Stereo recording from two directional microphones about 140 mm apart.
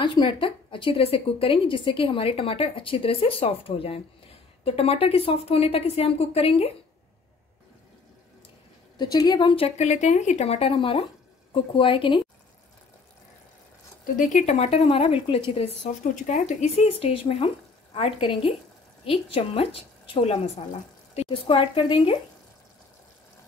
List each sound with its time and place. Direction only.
0.0 s a woman's voice: 35° left (ahead or behind)
8.9 s a woman's voice: 30° left (ahead or behind)
9.8 s a woman's voice: 55° left (ahead or behind); by 12.2 s 35° left (ahead or behind)
14.1 s a woman's voice: 55° left (ahead or behind); by 15.4 s 40° left (ahead or behind)
16.0 s a woman's voice: 65° left (ahead or behind); by 22.1 s 40° left (ahead or behind)